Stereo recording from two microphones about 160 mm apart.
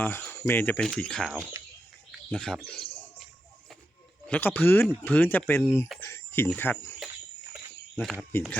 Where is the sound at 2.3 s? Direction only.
5° left (ahead or behind).